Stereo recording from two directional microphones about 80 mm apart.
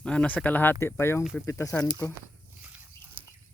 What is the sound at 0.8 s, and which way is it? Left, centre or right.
Speech, left.